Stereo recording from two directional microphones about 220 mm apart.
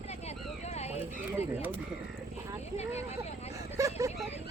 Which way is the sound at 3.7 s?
15° right (ahead or behind).